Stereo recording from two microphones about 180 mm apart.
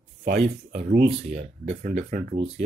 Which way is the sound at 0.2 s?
60° right (ahead or behind).